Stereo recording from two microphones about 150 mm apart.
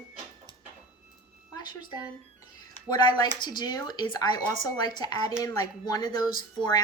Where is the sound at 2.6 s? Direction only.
30° left (ahead or behind).